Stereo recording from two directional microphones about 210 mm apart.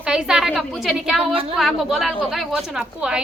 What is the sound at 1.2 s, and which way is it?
Speech, 25° right (ahead or behind).